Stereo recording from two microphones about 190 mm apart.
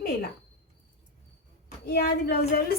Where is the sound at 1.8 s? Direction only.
55° left (ahead or behind).